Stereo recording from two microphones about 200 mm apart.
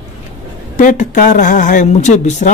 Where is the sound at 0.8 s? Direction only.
40° left (ahead or behind).